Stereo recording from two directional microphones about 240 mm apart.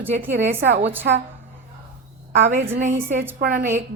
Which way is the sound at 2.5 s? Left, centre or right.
Right.